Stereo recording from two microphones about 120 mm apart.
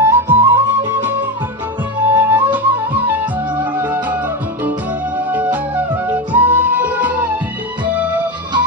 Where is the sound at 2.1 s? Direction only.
15° right (ahead or behind).